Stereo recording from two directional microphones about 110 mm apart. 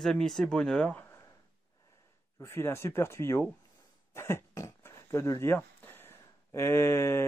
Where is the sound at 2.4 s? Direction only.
25° left (ahead or behind).